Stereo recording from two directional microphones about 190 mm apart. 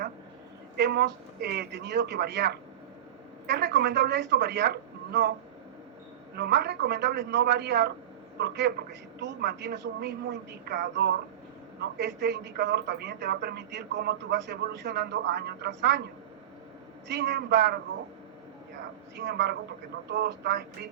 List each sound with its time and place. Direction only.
0.8 s a man's voice: 60° right (ahead or behind)
6.3 s a man's voice: 60° right (ahead or behind)
17.1 s a man's voice: 60° right (ahead or behind)
19.1 s a man's voice: 60° right (ahead or behind)